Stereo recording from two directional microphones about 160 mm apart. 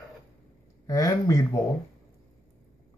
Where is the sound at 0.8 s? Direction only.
20° left (ahead or behind).